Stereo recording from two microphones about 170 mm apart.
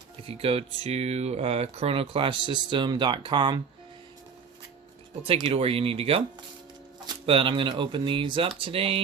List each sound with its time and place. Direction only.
0.3 s speech: 35° right (ahead or behind)
5.2 s speech: 35° right (ahead or behind)